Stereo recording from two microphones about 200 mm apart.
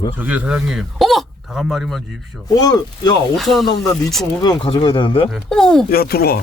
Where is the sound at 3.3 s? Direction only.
Centre (ahead or behind).